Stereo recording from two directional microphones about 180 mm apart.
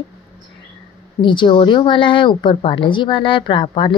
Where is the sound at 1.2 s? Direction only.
25° left (ahead or behind).